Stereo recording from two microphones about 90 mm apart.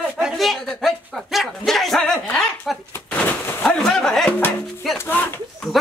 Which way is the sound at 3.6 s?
5° left (ahead or behind).